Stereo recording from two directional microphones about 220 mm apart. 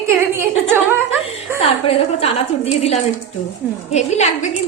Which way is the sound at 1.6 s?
25° left (ahead or behind).